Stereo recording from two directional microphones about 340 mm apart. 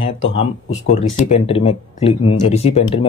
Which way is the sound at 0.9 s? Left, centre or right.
Centre.